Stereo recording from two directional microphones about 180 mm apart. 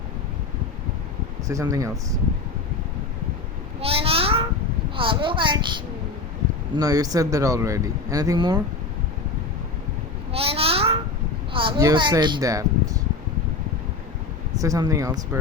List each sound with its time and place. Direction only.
1.5 s speech: 20° right (ahead or behind)
3.8 s a child's voice: 30° right (ahead or behind)
10.3 s babbling: 35° right (ahead or behind)
11.5 s speech: 25° right (ahead or behind)
14.5 s speech: 20° right (ahead or behind)